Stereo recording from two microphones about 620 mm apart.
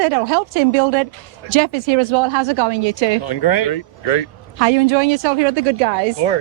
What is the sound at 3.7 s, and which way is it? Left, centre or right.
Speech, left.